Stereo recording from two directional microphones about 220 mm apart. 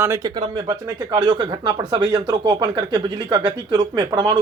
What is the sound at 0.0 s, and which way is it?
Speech, 15° right (ahead or behind).